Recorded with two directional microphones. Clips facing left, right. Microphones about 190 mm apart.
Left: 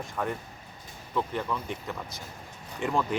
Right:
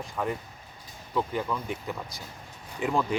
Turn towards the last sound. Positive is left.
turn(degrees=0)  # may be behind; listen again after turning